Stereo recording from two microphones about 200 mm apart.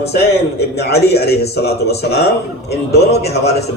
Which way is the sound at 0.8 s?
55° left (ahead or behind).